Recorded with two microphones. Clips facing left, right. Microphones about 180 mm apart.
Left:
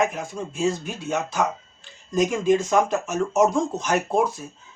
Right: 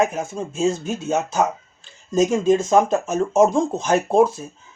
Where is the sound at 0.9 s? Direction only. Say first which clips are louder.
Right 4 dB; 45° right (ahead or behind).